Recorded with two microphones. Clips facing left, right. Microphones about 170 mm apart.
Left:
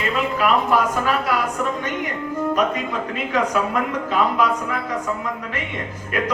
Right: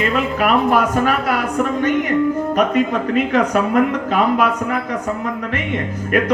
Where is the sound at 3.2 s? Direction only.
60° right (ahead or behind).